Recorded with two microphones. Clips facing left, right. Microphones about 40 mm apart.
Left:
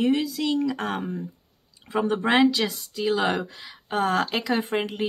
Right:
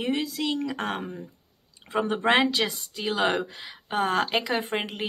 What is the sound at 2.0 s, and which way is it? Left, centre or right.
Speech, right.